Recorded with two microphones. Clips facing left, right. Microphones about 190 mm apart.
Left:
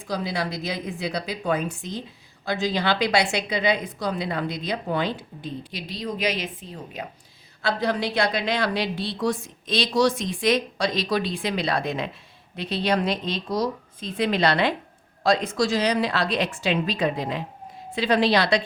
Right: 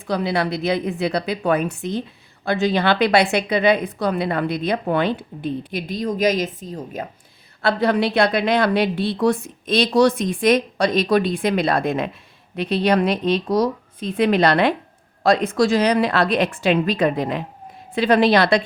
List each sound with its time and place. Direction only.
0.1 s a woman's voice: 65° right (ahead or behind); by 7.1 s 45° right (ahead or behind)
7.6 s a woman's voice: 60° right (ahead or behind)